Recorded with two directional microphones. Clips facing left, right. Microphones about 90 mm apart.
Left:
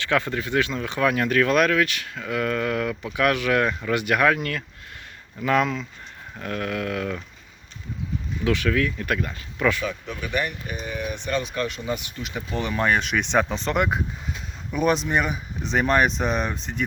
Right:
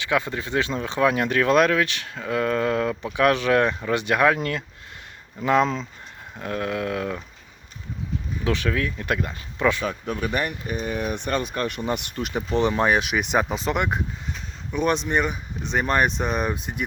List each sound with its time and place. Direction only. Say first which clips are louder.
0.0 s speech: left 1 dB; 20° right (ahead or behind)
8.4 s speech: left 2 dB; 25° right (ahead or behind)
9.8 s speech: right 3 dB; 40° right (ahead or behind)
12.5 s speech: right 4 dB; 25° right (ahead or behind)
12.9 s speech: even; 5° right (ahead or behind)